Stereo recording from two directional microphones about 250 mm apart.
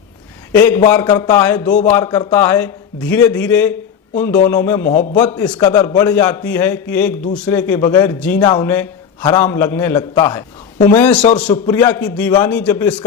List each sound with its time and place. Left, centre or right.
0.5 s a man's voice: centre